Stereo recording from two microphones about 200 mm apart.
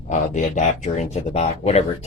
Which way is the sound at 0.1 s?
40° left (ahead or behind).